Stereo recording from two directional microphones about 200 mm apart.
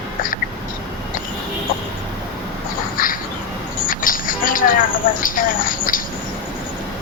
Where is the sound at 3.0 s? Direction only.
45° left (ahead or behind).